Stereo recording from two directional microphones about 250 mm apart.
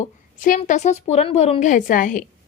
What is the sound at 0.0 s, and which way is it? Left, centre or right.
A woman's voice, left.